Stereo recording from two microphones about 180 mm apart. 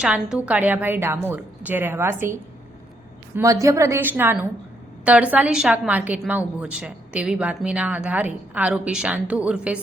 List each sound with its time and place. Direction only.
0.0 s a woman's voice: 5° right (ahead or behind)